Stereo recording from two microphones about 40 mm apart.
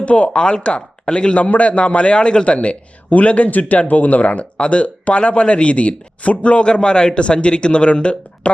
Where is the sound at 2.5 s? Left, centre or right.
Left.